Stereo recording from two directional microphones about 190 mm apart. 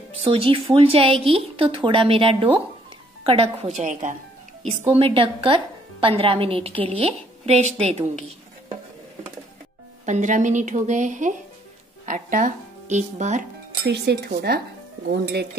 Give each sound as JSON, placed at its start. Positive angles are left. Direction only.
{"t": 0.2, "sound": "a woman's voice", "side_deg": -30}
{"t": 4.9, "sound": "a woman's voice", "side_deg": -30}
{"t": 10.0, "sound": "a woman's voice", "side_deg": -40}
{"t": 13.8, "sound": "speech", "side_deg": -60}